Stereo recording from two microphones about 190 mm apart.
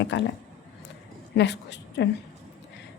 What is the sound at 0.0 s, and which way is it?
Speech, 70° left (ahead or behind).